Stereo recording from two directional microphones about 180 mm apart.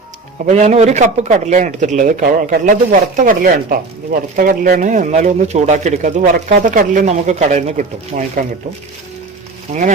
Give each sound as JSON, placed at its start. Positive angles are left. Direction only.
{"t": 0.4, "sound": "speech", "side_deg": -40}